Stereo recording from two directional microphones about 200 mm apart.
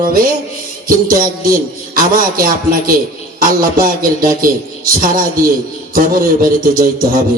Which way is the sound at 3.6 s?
45° right (ahead or behind).